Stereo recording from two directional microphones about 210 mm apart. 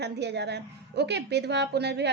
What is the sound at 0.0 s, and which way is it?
A woman's voice, 55° right (ahead or behind).